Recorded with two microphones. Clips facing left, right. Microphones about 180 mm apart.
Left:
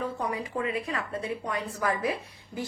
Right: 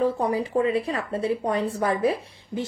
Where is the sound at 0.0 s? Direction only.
30° right (ahead or behind).